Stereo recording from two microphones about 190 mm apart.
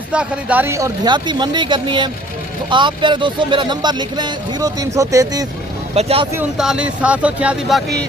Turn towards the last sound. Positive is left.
turn(degrees=-5)  # may be behind; listen again after turning